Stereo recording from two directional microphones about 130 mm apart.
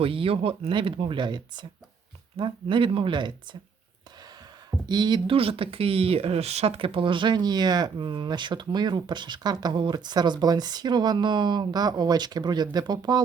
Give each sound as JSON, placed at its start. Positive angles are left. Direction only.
{"t": 0.0, "sound": "speech", "side_deg": -45}
{"t": 4.9, "sound": "speech", "side_deg": -35}